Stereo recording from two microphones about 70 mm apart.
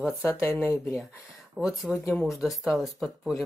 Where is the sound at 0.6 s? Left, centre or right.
Left.